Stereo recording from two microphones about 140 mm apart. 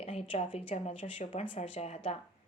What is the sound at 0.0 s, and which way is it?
A woman's voice, 45° left (ahead or behind).